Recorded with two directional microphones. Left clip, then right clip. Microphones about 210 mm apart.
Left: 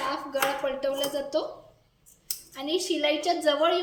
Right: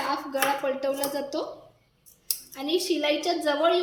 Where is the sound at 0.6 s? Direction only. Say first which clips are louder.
Right 1 dB; 30° right (ahead or behind).